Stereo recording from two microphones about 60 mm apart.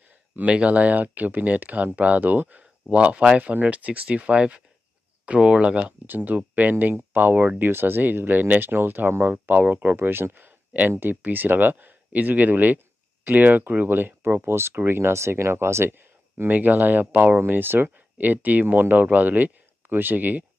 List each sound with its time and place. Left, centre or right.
0.4 s speech: right
6.0 s speech: right